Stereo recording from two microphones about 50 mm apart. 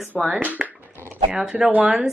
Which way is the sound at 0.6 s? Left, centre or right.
Centre.